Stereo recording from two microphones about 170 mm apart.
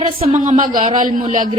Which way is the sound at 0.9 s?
55° right (ahead or behind).